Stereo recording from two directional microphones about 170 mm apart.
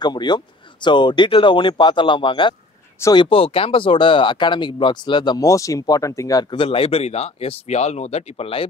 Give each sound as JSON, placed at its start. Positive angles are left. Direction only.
{"t": 0.0, "sound": "speech", "side_deg": 25}